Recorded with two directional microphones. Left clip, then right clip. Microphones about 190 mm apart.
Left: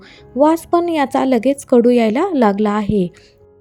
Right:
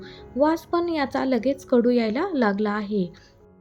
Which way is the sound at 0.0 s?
35° left (ahead or behind).